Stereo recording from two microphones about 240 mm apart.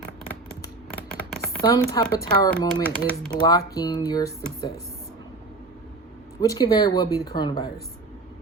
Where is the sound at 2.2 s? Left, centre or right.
Centre.